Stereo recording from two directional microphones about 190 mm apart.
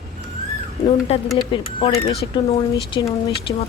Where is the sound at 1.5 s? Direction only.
25° left (ahead or behind).